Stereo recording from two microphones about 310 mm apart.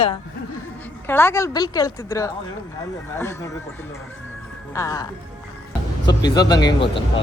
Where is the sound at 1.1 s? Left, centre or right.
Centre.